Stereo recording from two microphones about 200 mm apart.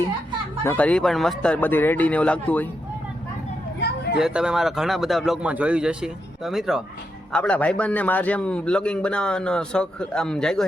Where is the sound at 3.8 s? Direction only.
55° left (ahead or behind).